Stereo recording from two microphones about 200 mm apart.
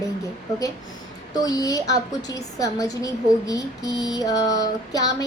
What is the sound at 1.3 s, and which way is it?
A woman's voice, 20° left (ahead or behind).